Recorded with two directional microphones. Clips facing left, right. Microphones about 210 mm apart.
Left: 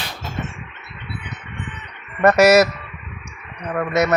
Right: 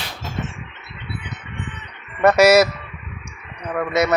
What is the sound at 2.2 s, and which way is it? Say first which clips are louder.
Speech: even; 10° right (ahead or behind).